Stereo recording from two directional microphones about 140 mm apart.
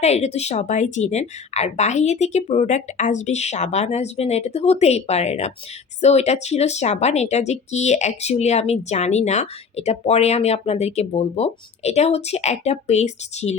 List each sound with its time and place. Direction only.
0.0 s speech: 50° left (ahead or behind)